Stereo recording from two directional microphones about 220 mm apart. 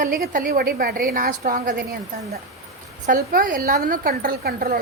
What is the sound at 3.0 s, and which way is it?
A woman's voice, 40° right (ahead or behind).